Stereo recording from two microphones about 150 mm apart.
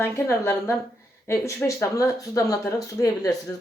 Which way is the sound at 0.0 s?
15° left (ahead or behind).